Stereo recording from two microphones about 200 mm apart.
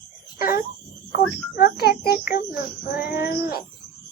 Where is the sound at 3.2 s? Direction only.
50° left (ahead or behind).